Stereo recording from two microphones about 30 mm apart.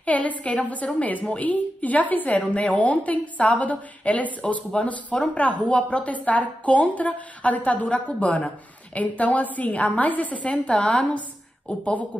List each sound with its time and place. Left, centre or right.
0.0 s a woman's voice: left
0.9 s a woman's voice: left
8.9 s a woman's voice: left
10.3 s a woman's voice: left
10.8 s a woman's voice: left